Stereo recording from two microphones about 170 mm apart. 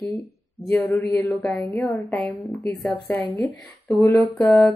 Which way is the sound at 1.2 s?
10° left (ahead or behind).